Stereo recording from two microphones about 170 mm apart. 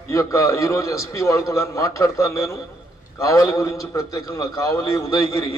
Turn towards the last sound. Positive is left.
turn(degrees=20)  # may be behind; listen again after turning